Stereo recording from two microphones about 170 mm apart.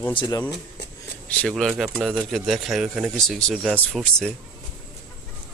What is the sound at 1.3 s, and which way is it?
Speech, 5° left (ahead or behind).